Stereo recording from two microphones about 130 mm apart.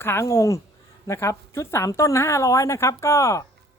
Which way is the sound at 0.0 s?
20° left (ahead or behind).